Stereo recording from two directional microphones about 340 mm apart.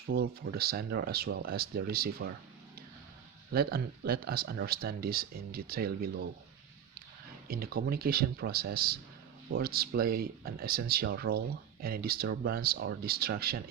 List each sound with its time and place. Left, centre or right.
0.1 s speech: right
3.5 s speech: right
7.4 s speech: right